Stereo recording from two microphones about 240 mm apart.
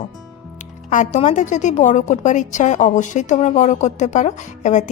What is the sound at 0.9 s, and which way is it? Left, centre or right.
A woman's voice, left.